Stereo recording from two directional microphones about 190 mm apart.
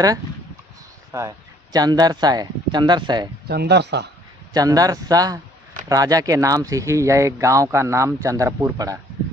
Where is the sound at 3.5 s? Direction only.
60° right (ahead or behind).